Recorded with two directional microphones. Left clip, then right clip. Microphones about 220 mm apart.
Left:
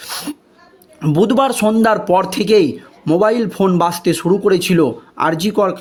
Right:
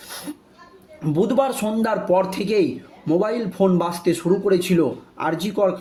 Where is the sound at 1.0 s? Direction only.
40° left (ahead or behind).